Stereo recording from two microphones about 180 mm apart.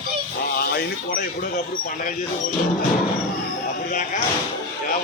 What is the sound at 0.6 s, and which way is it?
Speech, 55° left (ahead or behind).